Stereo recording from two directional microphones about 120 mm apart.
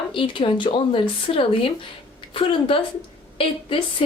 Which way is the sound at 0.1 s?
45° left (ahead or behind).